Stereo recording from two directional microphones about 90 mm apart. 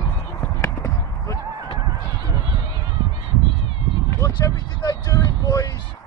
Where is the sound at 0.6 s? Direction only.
35° left (ahead or behind).